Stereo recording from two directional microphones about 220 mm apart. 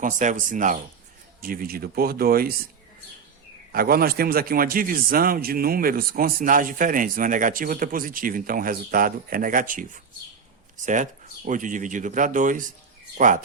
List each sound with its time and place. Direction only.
0.0 s a man's voice: 35° right (ahead or behind)
3.7 s a man's voice: 40° right (ahead or behind)